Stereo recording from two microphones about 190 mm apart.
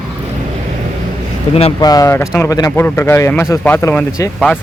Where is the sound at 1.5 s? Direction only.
30° left (ahead or behind).